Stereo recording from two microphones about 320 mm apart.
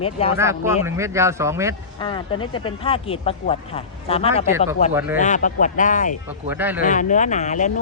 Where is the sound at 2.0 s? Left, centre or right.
Centre.